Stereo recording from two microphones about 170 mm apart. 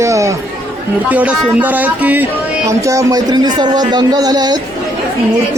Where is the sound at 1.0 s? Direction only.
10° right (ahead or behind); by 4.6 s 25° right (ahead or behind).